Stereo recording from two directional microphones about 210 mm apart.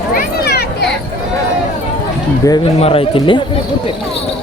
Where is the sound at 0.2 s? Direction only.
50° left (ahead or behind).